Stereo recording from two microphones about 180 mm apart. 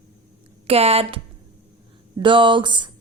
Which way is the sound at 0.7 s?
35° right (ahead or behind).